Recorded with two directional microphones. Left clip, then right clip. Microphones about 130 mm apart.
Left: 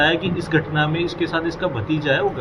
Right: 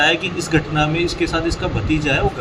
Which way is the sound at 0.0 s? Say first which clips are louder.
Right 2 dB; 25° right (ahead or behind).